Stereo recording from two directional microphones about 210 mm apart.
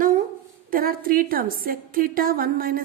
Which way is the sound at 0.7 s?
45° right (ahead or behind).